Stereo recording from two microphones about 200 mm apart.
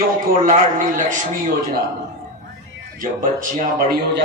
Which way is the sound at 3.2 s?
40° right (ahead or behind).